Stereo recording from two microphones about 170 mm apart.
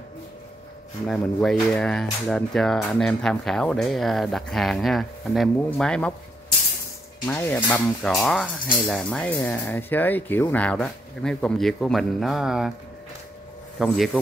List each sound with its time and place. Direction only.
1.0 s speech: 5° left (ahead or behind)
7.2 s speech: 10° left (ahead or behind)
13.7 s speech: centre (ahead or behind)